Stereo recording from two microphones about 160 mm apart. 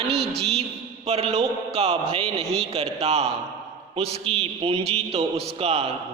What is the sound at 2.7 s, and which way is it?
A man's voice, 40° right (ahead or behind).